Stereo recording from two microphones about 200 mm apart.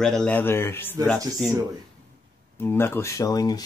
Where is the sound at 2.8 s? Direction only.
15° left (ahead or behind).